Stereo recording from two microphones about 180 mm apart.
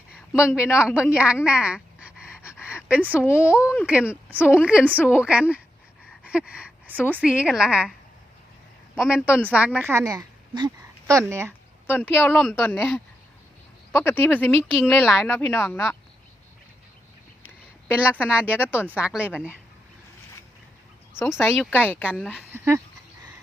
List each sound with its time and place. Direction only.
0.6 s a woman's voice: 5° right (ahead or behind)
1.5 s pant: 5° right (ahead or behind)
3.2 s speech: 15° left (ahead or behind)
3.5 s a woman's voice: 5° right (ahead or behind)
6.1 s a sound: 5° right (ahead or behind)
7.0 s a woman's voice: 10° right (ahead or behind)
9.0 s a woman's voice: 5° right (ahead or behind)
11.9 s speech: 10° left (ahead or behind)
17.9 s a woman's voice: 5° right (ahead or behind)
21.3 s speech: 10° left (ahead or behind)
22.4 s speech: 15° right (ahead or behind)